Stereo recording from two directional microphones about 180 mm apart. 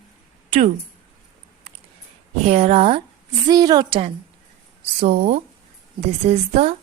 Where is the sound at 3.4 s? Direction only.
20° right (ahead or behind); by 6.8 s 35° right (ahead or behind).